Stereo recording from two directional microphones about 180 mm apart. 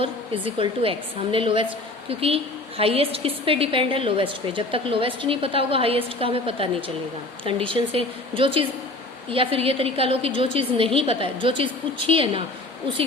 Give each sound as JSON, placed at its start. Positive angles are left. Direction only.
{"t": 0.0, "sound": "a woman's voice", "side_deg": -30}